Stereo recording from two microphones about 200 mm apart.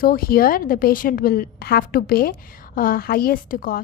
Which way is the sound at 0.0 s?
50° left (ahead or behind).